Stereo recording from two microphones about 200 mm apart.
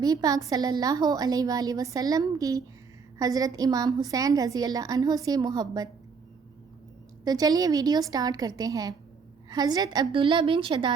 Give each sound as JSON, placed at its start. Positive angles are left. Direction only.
{"t": 0.0, "sound": "a woman's voice", "side_deg": -20}
{"t": 7.3, "sound": "a woman's voice", "side_deg": -20}